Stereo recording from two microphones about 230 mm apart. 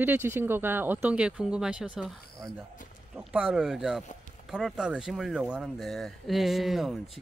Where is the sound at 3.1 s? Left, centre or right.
Centre.